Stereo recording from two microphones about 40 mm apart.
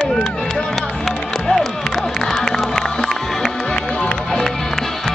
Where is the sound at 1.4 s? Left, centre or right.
Centre.